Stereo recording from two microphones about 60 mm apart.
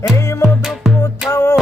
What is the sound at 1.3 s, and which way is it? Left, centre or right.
Music, left.